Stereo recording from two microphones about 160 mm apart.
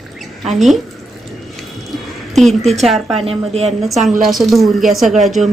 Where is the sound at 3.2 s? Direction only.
40° right (ahead or behind).